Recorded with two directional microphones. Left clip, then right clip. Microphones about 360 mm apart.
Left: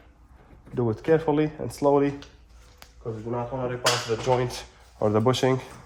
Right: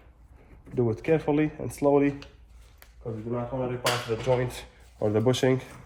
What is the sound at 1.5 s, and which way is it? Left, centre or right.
Speech, centre.